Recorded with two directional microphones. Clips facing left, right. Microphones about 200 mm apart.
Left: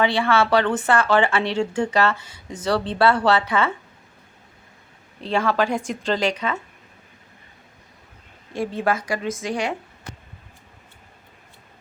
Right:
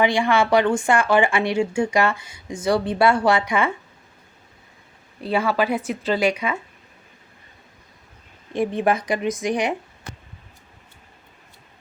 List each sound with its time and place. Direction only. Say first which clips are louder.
0.0 s speech: right 1 dB; 15° right (ahead or behind)
5.2 s speech: even; 10° right (ahead or behind)
8.5 s speech: right 3 dB; 20° right (ahead or behind)